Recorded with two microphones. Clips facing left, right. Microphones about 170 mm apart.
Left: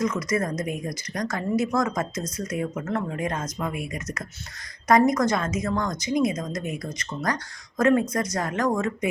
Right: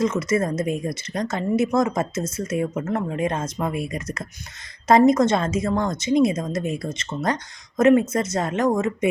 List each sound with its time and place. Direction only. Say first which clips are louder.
0.0 s speech: right 4 dB; 25° right (ahead or behind)